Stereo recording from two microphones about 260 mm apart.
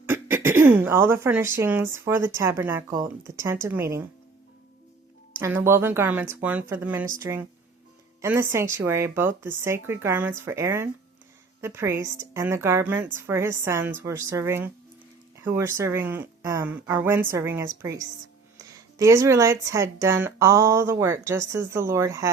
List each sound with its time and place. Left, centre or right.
0.0 s speech: centre
5.4 s speech: centre
18.9 s speech: centre